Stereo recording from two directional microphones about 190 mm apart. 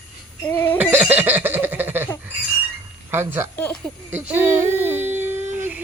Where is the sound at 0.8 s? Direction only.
10° right (ahead or behind).